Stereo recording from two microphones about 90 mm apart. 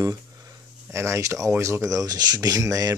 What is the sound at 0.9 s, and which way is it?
Speech, 30° right (ahead or behind).